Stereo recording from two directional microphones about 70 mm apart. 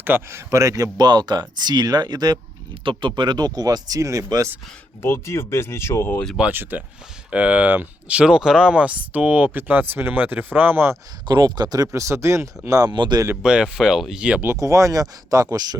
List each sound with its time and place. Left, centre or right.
0.0 s a man's voice: right
0.3 s speech: right
0.9 s speech: right
5.0 s speech: left
6.5 s speech: right
11.3 s speech: right
11.9 s speech: right
12.8 s speech: right
13.3 s speech: centre
14.4 s speech: right